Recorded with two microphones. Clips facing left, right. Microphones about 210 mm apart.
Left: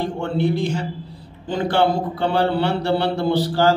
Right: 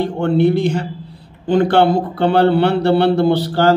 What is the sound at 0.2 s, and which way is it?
A man's voice, 60° right (ahead or behind).